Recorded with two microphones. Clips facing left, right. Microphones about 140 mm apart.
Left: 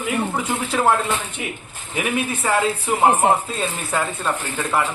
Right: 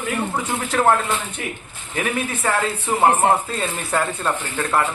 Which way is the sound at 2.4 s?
10° left (ahead or behind).